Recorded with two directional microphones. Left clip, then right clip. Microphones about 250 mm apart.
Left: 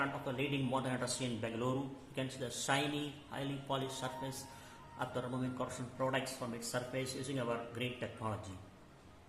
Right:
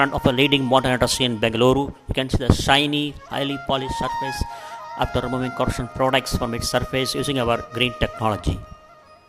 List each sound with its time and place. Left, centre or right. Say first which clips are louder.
0.0 s speech: right 19 dB; right